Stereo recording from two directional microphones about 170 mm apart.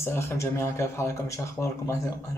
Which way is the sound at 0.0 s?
15° left (ahead or behind).